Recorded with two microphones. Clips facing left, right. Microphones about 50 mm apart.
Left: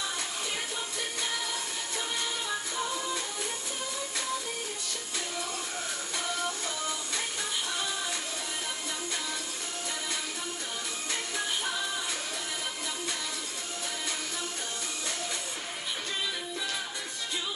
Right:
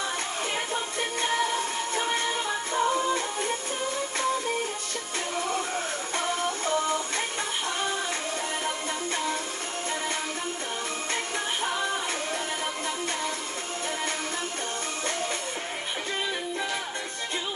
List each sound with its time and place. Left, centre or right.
2.0 s music: right
6.1 s music: right
8.6 s music: right